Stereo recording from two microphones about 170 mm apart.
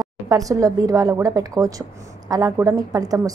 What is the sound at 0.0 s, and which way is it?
Speech, 20° right (ahead or behind).